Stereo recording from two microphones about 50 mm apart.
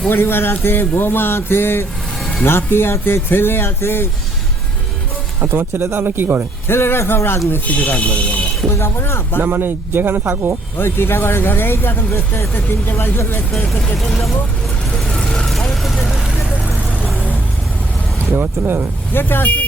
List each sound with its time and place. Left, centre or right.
0.1 s speech: left
5.4 s speech: right
6.7 s speech: left
7.7 s speech: left
8.8 s speech: left
9.4 s speech: right
10.8 s speech: left
13.5 s speech: centre
15.4 s vehicle: centre
18.3 s speech: right
19.1 s speech: left